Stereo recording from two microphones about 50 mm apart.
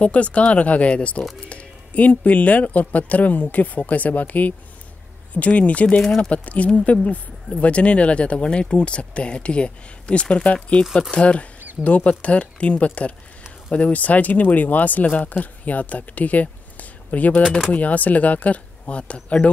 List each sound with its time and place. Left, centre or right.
0.0 s speech: left